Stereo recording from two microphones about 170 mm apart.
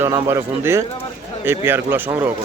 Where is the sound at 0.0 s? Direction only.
15° right (ahead or behind).